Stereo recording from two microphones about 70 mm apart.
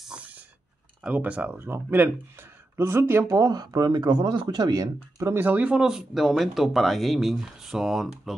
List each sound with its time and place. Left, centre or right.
0.1 s a sound: centre
1.0 s speech: centre; by 3.3 s right
3.3 s speech: right
5.4 s speech: right
5.8 s speech: centre